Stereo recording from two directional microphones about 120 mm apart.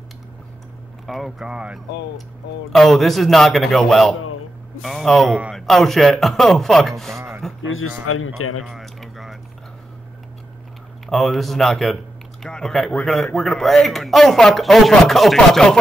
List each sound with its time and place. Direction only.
1.0 s speech: centre (ahead or behind)
7.2 s a sound: 20° right (ahead or behind)
8.6 s speech: centre (ahead or behind)
11.1 s speech: centre (ahead or behind)